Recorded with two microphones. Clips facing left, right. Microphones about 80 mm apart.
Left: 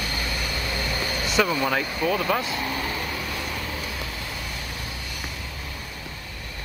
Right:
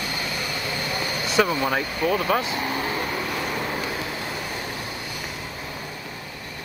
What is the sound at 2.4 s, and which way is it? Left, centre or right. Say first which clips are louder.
Vehicle: right 2 dB; right.